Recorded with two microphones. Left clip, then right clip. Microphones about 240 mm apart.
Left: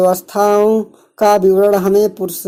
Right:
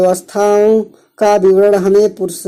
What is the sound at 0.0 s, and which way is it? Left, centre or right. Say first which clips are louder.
Speech: right 1 dB; centre.